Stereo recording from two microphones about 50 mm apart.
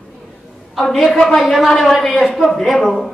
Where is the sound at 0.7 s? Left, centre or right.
Centre.